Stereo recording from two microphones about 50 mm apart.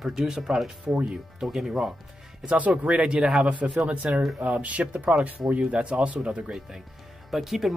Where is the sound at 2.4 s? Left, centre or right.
Right.